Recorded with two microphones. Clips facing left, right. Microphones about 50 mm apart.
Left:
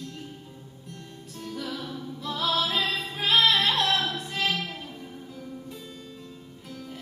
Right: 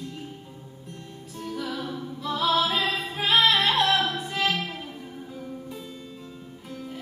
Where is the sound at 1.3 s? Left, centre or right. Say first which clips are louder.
Right 3 dB; centre.